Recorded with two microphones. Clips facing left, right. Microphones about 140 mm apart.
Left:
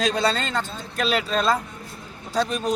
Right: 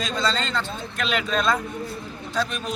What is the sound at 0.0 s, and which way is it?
A man's voice, 65° left (ahead or behind).